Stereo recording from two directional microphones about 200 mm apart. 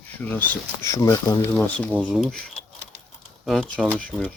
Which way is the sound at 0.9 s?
15° left (ahead or behind).